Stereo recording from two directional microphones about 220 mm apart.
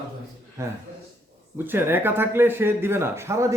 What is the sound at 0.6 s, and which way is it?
Speech, 15° right (ahead or behind).